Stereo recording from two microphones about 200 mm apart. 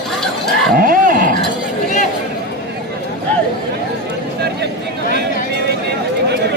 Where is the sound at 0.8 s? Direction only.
45° right (ahead or behind).